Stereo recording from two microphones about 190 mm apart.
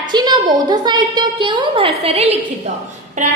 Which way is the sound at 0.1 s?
20° right (ahead or behind).